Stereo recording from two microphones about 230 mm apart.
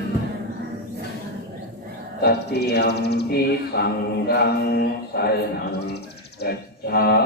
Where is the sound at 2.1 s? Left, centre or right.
Left.